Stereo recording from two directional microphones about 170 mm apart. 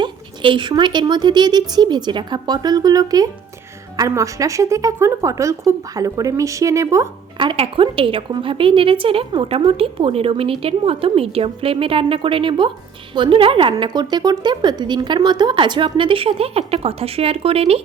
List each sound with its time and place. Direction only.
0.0 s speech: 30° right (ahead or behind)
7.3 s a woman's voice: 30° right (ahead or behind)